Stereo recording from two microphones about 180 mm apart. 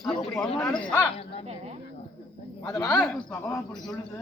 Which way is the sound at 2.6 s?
20° left (ahead or behind).